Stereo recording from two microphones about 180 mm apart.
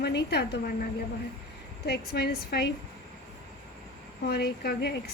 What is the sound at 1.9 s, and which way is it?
Speech, 65° left (ahead or behind).